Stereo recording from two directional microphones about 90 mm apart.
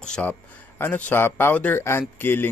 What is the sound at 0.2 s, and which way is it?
Speech, 20° left (ahead or behind).